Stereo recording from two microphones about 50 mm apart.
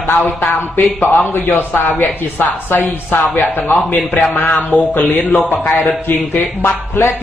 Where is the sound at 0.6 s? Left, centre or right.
Left.